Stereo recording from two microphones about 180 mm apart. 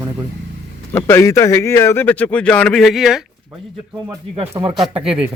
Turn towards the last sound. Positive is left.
turn(degrees=-30)  # may be behind; listen again after turning